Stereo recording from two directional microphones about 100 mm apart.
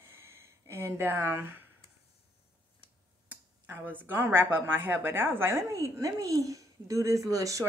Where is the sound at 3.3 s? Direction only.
20° right (ahead or behind).